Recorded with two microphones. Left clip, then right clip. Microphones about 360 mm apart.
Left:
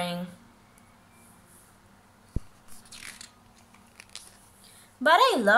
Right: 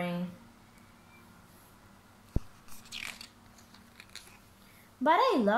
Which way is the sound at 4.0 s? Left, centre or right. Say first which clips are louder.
Left 3 dB; centre.